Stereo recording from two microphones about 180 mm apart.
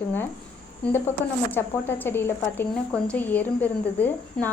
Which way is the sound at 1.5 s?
10° left (ahead or behind).